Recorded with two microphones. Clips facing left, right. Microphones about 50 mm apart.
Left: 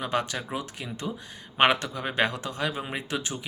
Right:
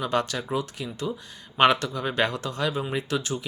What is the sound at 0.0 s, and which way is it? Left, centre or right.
Speech, centre.